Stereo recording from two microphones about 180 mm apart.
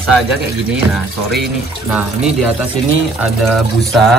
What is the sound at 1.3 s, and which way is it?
Speech, centre (ahead or behind).